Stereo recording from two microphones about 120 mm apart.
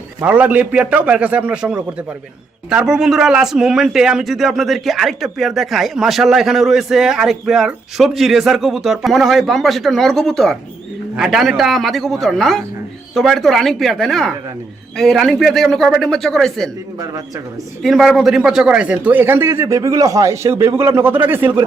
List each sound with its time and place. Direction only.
0.2 s a man's voice: 15° right (ahead or behind); by 16.6 s 5° left (ahead or behind)
17.0 s a man's voice: 30° right (ahead or behind)
17.8 s speech: centre (ahead or behind); by 21.6 s 15° right (ahead or behind)